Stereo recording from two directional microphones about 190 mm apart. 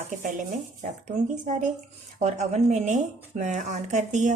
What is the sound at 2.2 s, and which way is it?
A woman's voice, 35° right (ahead or behind).